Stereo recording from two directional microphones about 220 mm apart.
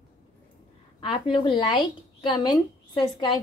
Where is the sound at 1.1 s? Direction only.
25° left (ahead or behind).